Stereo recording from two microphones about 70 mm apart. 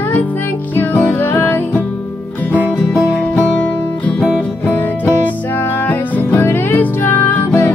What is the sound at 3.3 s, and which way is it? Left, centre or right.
Music, left.